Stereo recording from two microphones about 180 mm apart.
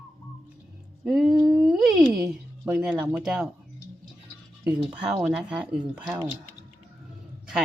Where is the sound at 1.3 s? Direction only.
20° right (ahead or behind).